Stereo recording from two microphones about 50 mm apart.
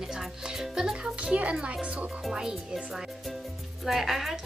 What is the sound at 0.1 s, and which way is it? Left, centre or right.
Music, centre.